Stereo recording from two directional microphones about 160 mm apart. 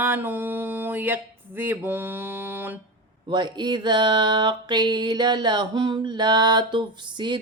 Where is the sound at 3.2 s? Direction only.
25° right (ahead or behind).